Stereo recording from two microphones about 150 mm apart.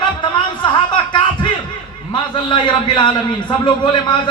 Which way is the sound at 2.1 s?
35° left (ahead or behind).